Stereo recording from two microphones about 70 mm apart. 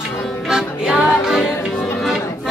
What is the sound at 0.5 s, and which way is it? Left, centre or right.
Music, centre.